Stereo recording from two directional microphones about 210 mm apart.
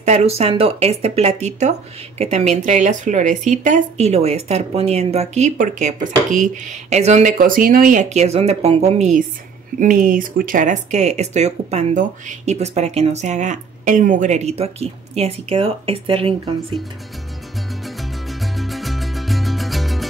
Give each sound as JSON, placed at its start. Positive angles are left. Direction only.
{"t": 0.0, "sound": "speech", "side_deg": -30}
{"t": 17.8, "sound": "music", "side_deg": 0}